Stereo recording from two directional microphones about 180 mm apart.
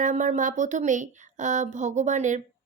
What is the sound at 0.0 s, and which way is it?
A child's voice, 45° right (ahead or behind).